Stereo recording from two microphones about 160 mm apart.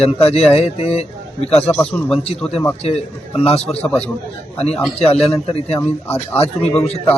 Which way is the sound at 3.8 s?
10° left (ahead or behind).